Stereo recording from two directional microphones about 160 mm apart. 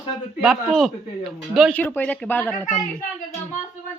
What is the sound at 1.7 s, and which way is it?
Speech, 10° left (ahead or behind).